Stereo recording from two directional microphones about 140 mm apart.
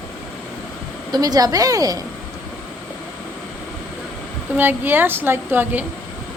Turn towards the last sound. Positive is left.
turn(degrees=-15)  # may be behind; listen again after turning